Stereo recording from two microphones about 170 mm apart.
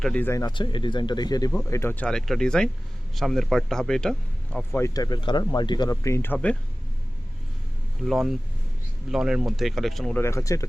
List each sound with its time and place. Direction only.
0.0 s speech: 10° left (ahead or behind)
4.7 s speech: 20° left (ahead or behind)
8.0 s speech: centre (ahead or behind)
10.2 s speech: 15° left (ahead or behind)